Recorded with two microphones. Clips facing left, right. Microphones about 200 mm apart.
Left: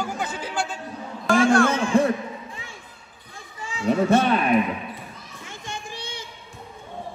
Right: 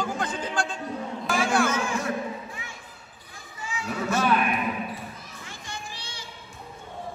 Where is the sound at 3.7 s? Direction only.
30° left (ahead or behind).